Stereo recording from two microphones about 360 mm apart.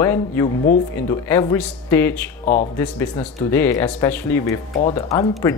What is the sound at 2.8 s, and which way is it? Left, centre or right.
Speech, centre.